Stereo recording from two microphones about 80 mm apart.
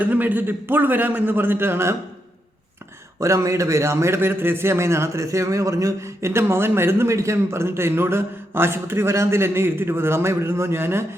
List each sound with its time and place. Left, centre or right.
0.0 s a man's voice: right
3.2 s a man's voice: right